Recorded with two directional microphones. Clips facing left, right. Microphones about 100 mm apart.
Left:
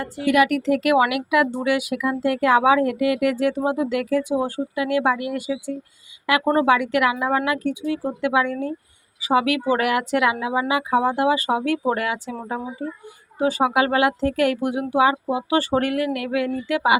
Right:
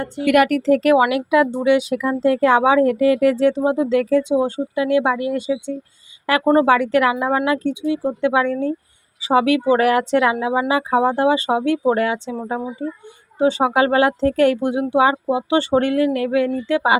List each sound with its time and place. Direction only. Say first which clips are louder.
0.3 s speech: right 3 dB; 50° right (ahead or behind); by 17.0 s 30° right (ahead or behind)